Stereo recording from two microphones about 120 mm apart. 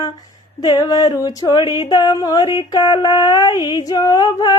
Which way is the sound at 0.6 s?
30° left (ahead or behind).